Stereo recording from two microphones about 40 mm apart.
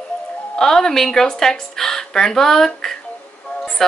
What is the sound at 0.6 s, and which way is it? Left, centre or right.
Speech, centre.